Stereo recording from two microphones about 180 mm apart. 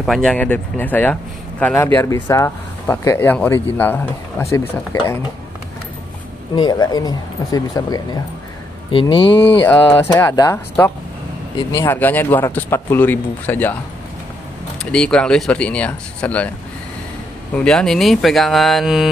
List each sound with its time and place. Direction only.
0.0 s speech: centre (ahead or behind)
6.5 s speech: 25° left (ahead or behind)
10.1 s speech: 15° left (ahead or behind)
14.8 s speech: 5° left (ahead or behind)
17.6 s speech: 5° left (ahead or behind)